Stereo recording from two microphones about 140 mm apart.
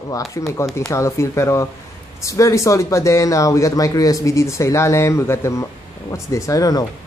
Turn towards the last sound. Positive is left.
turn(degrees=25)  # may be behind; listen again after turning